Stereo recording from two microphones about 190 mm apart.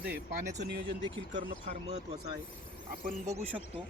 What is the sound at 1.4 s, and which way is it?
Speech, 35° right (ahead or behind).